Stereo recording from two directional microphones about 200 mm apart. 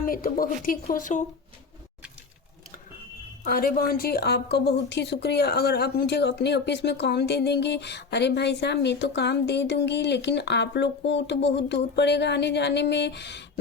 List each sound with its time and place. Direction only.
0.0 s speech: 45° left (ahead or behind)
3.4 s a woman's voice: 45° left (ahead or behind)